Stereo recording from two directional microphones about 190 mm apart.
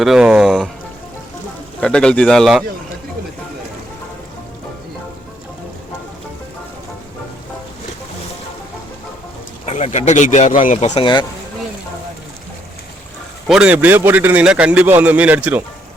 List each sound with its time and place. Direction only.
0.0 s speech: 5° right (ahead or behind)
1.8 s speech: 5° left (ahead or behind)
9.6 s speech: 35° left (ahead or behind)
10.8 s speech: 35° left (ahead or behind)
13.5 s a man's voice: 5° right (ahead or behind)